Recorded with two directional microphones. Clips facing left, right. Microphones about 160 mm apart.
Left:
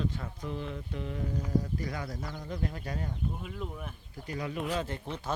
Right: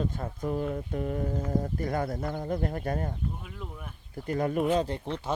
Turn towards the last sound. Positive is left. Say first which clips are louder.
# right 7 dB
turn(degrees=-30)  # may be behind; listen again after turning